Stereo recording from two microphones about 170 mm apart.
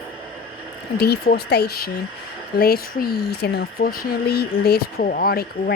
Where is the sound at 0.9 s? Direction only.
70° left (ahead or behind).